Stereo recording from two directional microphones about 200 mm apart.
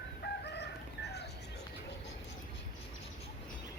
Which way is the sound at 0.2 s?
55° left (ahead or behind).